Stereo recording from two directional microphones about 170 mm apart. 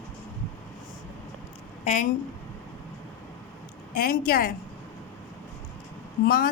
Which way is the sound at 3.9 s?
60° left (ahead or behind).